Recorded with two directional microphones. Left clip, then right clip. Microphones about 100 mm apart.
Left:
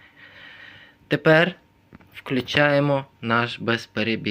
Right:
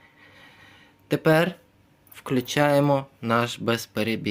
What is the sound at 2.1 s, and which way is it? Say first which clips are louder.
Speech: left 1 dB; 65° right (ahead or behind).